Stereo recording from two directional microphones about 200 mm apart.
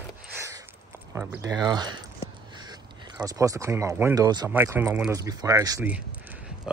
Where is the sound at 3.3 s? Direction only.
15° right (ahead or behind).